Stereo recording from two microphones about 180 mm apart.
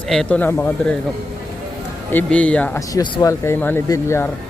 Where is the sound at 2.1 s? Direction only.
5° left (ahead or behind).